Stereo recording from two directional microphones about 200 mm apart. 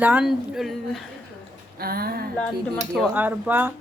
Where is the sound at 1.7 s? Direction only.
50° right (ahead or behind).